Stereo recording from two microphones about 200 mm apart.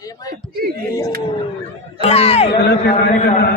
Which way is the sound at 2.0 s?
30° left (ahead or behind).